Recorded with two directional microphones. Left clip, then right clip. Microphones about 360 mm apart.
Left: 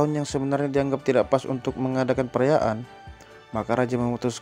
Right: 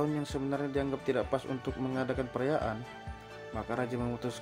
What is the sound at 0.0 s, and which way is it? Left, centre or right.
Speech, centre.